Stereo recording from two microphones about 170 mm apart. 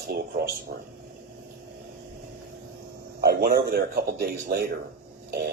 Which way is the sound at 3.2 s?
65° right (ahead or behind).